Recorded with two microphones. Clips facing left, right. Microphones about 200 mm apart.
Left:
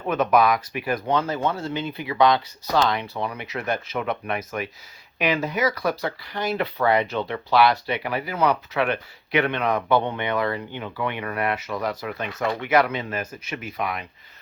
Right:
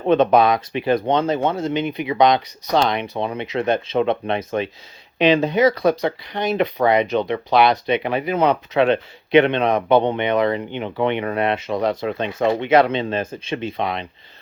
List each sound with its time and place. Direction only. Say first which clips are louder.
0.0 s speech: right 5 dB; 30° right (ahead or behind)